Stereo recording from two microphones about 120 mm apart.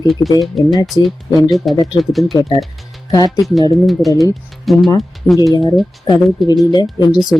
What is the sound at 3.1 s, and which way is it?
Speech, 30° left (ahead or behind).